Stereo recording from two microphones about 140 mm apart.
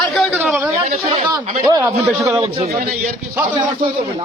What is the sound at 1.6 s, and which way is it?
Speech, 25° right (ahead or behind).